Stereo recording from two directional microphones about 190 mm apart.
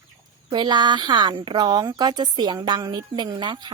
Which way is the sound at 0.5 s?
25° right (ahead or behind).